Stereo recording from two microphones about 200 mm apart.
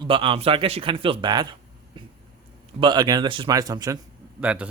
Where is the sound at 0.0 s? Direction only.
25° right (ahead or behind).